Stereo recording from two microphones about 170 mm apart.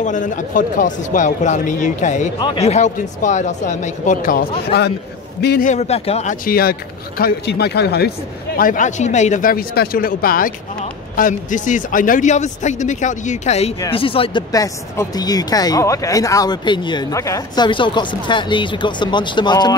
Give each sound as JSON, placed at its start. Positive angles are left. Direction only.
{"t": 0.0, "sound": "a man's voice", "side_deg": 50}
{"t": 2.4, "sound": "a man's voice", "side_deg": 35}
{"t": 5.6, "sound": "a man's voice", "side_deg": 45}
{"t": 6.4, "sound": "speech", "side_deg": 60}
{"t": 8.5, "sound": "a man's voice", "side_deg": 50}
{"t": 14.5, "sound": "speech", "side_deg": 20}